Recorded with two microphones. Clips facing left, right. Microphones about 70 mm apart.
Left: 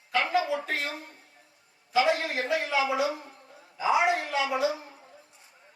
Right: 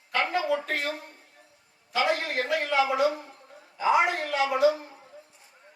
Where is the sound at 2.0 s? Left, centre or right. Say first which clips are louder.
Even; right.